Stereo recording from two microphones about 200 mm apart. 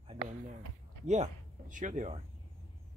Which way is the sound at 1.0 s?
35° right (ahead or behind).